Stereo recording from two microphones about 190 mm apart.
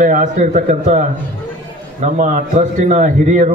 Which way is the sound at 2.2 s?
45° right (ahead or behind).